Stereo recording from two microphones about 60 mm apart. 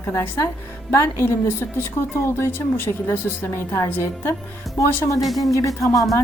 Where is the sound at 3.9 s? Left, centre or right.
Left.